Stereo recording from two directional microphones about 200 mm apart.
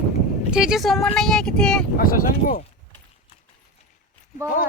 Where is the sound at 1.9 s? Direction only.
45° left (ahead or behind).